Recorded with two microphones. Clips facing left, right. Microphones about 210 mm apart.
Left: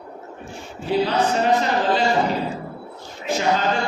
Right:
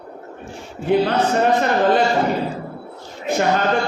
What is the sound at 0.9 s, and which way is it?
A man's voice, 55° right (ahead or behind).